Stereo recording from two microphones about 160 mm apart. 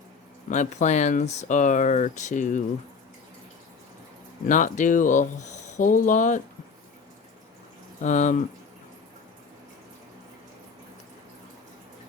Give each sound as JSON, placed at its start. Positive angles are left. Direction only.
{"t": 0.5, "sound": "speech", "side_deg": 50}
{"t": 4.4, "sound": "speech", "side_deg": 55}
{"t": 8.0, "sound": "speech", "side_deg": 50}